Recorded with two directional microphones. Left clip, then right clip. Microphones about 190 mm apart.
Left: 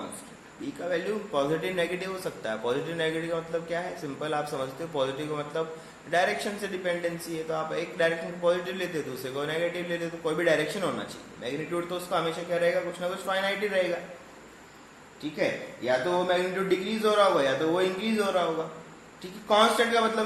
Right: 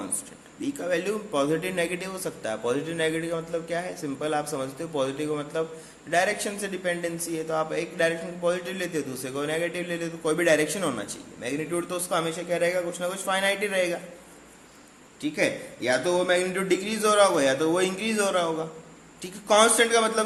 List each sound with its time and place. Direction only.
0.8 s a man's voice: 45° right (ahead or behind)
15.2 s a man's voice: 50° right (ahead or behind)
19.5 s a man's voice: 50° right (ahead or behind)